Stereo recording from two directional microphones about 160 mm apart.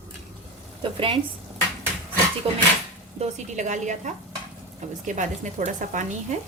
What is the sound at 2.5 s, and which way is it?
A woman's voice, 40° right (ahead or behind).